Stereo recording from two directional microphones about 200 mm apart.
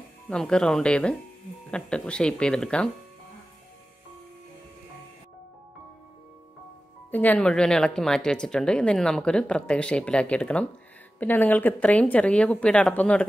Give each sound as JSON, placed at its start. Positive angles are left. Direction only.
{"t": 0.3, "sound": "speech", "side_deg": 5}
{"t": 7.1, "sound": "speech", "side_deg": 10}